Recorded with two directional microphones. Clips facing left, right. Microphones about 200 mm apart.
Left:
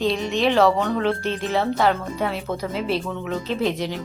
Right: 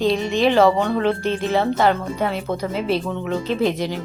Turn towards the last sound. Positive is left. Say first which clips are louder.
# right 3 dB
turn(degrees=0)  # may be behind; listen again after turning